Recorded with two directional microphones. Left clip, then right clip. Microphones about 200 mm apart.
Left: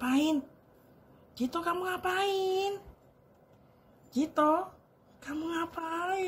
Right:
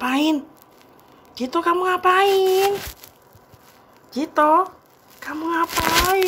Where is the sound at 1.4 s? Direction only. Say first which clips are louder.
Right 12 dB; 25° left (ahead or behind).